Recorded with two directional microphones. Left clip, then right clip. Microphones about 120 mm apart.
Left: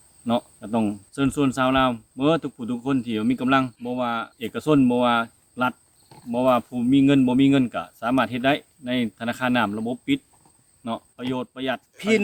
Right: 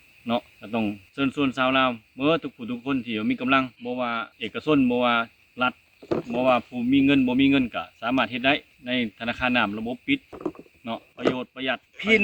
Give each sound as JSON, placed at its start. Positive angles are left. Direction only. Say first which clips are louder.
{"t": 0.3, "sound": "speech", "louder": "left 2 dB", "side_deg": 25}
{"t": 11.9, "sound": "speech", "louder": "right 1 dB", "side_deg": 5}